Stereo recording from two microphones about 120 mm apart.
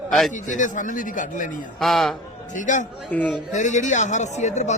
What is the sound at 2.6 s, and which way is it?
Speech, 90° left.